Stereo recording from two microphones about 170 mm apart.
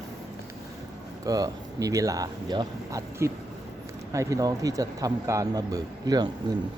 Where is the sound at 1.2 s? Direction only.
20° right (ahead or behind).